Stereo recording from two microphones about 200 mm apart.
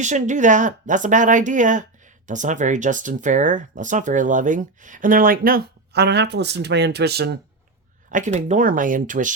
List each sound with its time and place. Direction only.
0.0 s speech: 35° right (ahead or behind); by 7.3 s 55° right (ahead or behind)
8.1 s speech: 40° right (ahead or behind)